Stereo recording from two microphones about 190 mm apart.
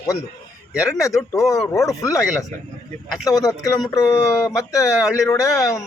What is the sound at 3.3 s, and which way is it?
Speech, 20° left (ahead or behind).